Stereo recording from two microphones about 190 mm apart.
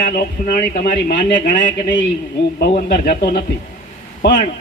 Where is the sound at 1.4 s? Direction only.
65° left (ahead or behind).